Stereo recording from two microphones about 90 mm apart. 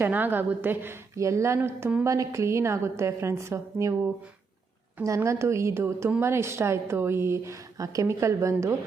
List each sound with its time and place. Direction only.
0.0 s a woman's voice: 20° right (ahead or behind)
5.0 s a woman's voice: 35° right (ahead or behind)